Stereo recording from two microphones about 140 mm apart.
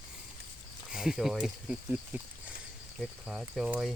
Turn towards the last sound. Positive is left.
turn(degrees=0)  # may be behind; listen again after turning